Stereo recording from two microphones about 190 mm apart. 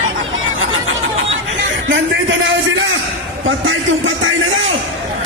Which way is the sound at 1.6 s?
75° right (ahead or behind).